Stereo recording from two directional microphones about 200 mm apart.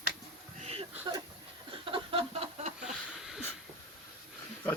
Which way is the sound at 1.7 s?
25° right (ahead or behind).